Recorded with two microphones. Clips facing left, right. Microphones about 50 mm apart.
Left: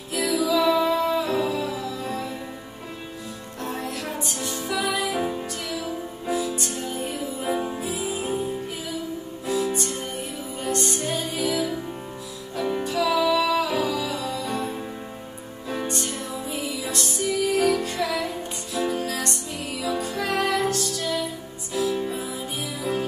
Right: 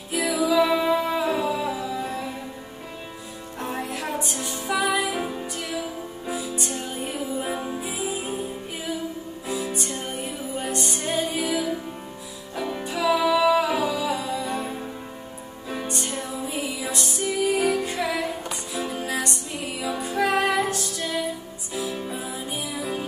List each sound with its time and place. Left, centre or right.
0.1 s music: centre
3.6 s music: centre
5.1 s music: centre
6.3 s music: centre
7.5 s music: centre
9.5 s music: centre
12.8 s music: centre
15.9 s music: centre
16.5 s music: right